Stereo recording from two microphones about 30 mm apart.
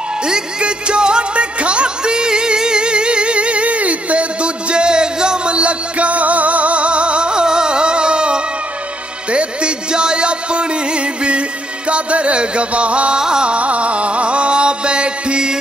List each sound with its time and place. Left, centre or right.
0.2 s music: right
13.2 s music: right
13.6 s music: right